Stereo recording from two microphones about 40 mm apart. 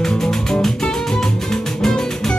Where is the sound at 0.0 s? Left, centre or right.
Centre.